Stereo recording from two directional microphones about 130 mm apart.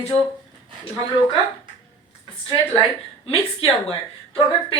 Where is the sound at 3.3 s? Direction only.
45° left (ahead or behind).